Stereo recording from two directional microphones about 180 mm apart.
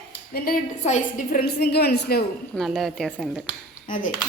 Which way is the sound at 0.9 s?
40° left (ahead or behind).